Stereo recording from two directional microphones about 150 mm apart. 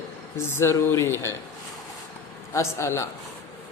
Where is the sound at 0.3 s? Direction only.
15° left (ahead or behind).